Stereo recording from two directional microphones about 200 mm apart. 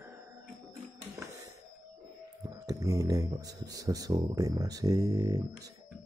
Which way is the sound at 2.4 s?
15° right (ahead or behind).